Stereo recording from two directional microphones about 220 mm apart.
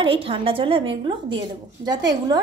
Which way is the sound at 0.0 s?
25° right (ahead or behind).